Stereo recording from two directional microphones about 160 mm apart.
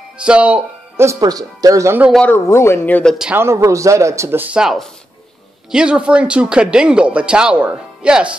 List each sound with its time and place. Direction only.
0.2 s speech: 5° right (ahead or behind)
2.0 s speech: 5° left (ahead or behind)
2.3 s speech: 15° left (ahead or behind)
3.3 s speech: 15° right (ahead or behind)